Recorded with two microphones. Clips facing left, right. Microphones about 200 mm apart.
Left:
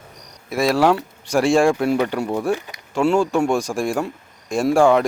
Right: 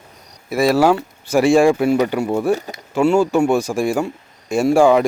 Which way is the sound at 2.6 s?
40° right (ahead or behind).